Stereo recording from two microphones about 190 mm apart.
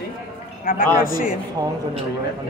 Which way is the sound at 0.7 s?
50° left (ahead or behind).